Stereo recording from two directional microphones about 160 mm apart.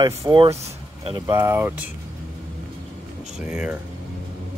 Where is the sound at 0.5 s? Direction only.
40° right (ahead or behind).